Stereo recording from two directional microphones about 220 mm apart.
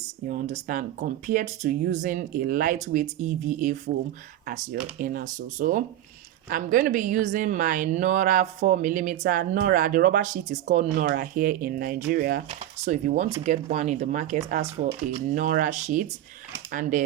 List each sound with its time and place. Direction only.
0.3 s speech: 35° right (ahead or behind)